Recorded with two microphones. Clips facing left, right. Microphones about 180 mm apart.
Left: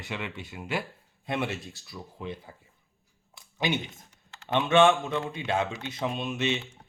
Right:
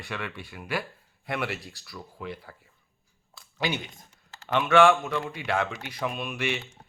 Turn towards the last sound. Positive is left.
turn(degrees=20)  # may be behind; listen again after turning